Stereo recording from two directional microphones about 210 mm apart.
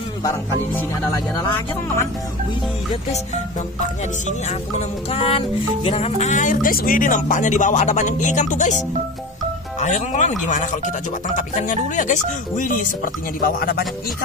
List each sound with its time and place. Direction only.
4.3 s music: 35° left (ahead or behind)
5.9 s speech: 30° left (ahead or behind)
9.8 s speech: 35° left (ahead or behind)